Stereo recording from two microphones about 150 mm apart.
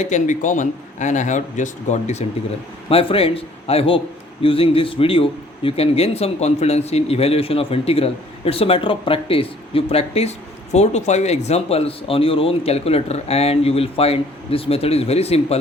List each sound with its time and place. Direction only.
0.0 s a man's voice: 55° left (ahead or behind)
2.9 s speech: 40° left (ahead or behind)